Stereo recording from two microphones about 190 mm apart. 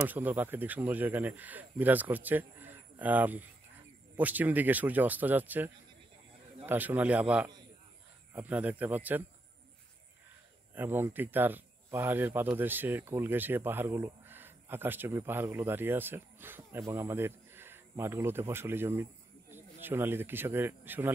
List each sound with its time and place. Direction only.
0.0 s speech: 10° right (ahead or behind)
10.7 s speech: 10° right (ahead or behind)